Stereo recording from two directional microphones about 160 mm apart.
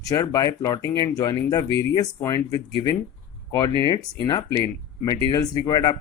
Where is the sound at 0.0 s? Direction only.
20° left (ahead or behind).